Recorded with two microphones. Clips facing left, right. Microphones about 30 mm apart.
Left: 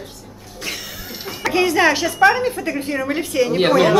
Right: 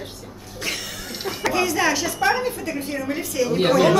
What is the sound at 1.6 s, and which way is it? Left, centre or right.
A woman's voice, left.